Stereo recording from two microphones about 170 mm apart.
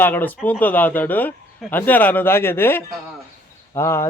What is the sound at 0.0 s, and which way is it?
Speech, 10° left (ahead or behind).